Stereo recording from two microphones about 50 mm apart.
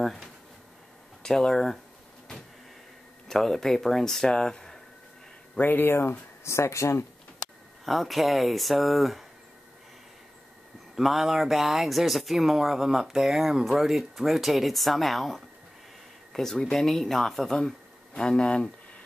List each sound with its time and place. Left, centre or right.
0.0 s a sound: centre
1.2 s speech: centre
3.3 s speech: centre
5.6 s speech: left
6.4 s speech: left
7.8 s speech: centre
11.0 s speech: centre